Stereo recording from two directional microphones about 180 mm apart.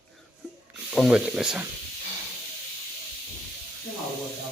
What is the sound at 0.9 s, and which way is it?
Speech, centre (ahead or behind).